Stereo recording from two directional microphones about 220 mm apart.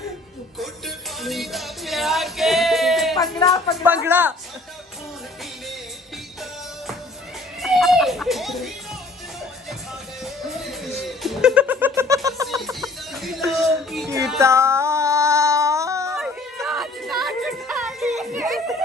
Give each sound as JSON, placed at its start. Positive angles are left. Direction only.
{"t": 0.6, "sound": "music", "side_deg": 0}
{"t": 3.3, "sound": "speech", "side_deg": 15}
{"t": 4.0, "sound": "a man's voice", "side_deg": -10}
{"t": 7.6, "sound": "children playing", "side_deg": 0}
{"t": 10.2, "sound": "music", "side_deg": 0}
{"t": 12.4, "sound": "music", "side_deg": 0}
{"t": 14.4, "sound": "a sound", "side_deg": -10}
{"t": 16.2, "sound": "music", "side_deg": 0}